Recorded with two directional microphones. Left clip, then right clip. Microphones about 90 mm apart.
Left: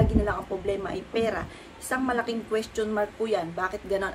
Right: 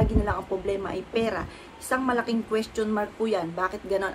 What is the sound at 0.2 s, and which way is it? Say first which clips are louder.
Speech: right 1 dB; 10° right (ahead or behind).